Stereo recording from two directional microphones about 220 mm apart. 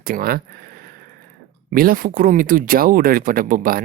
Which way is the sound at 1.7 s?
40° right (ahead or behind).